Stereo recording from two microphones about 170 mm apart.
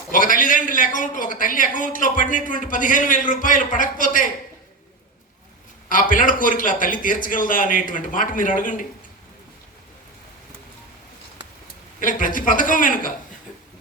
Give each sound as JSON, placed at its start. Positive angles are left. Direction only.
{"t": 0.1, "sound": "a man's voice", "side_deg": 55}
{"t": 5.9, "sound": "a man's voice", "side_deg": 50}
{"t": 11.9, "sound": "a man's voice", "side_deg": 55}